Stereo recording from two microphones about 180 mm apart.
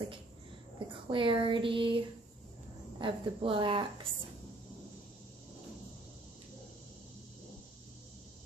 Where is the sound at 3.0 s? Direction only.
25° right (ahead or behind).